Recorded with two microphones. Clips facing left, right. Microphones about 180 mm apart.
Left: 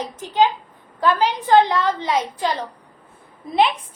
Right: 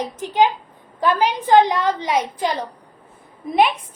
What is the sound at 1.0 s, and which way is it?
A woman's voice, 20° right (ahead or behind).